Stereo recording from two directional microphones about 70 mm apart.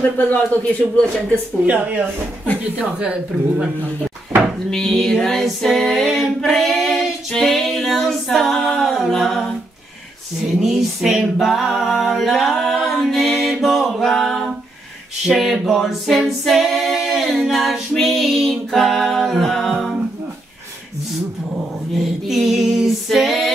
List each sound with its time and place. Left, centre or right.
0.0 s speech: left
1.7 s a woman's voice: right
4.6 s music: centre
10.6 s music: centre
15.2 s a capella: centre
21.5 s a capella: centre